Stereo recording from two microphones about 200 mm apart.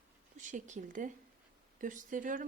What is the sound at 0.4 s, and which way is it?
A woman's voice, 40° right (ahead or behind).